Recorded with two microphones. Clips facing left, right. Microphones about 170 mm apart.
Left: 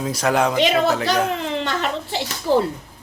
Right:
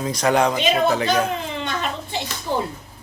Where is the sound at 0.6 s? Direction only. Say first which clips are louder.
Left 1 dB; 70° left (ahead or behind).